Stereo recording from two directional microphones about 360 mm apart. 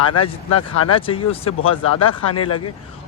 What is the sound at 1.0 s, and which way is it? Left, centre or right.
Speech, centre.